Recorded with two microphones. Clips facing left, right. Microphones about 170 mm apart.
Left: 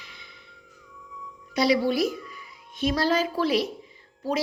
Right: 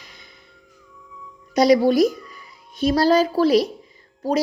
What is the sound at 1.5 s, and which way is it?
A woman's voice, 45° right (ahead or behind).